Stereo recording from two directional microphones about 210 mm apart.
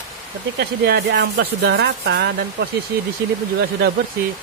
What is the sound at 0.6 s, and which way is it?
Speech, 50° right (ahead or behind).